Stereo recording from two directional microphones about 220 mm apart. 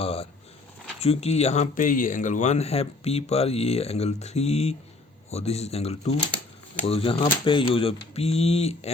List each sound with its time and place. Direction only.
0.0 s speech: 25° left (ahead or behind)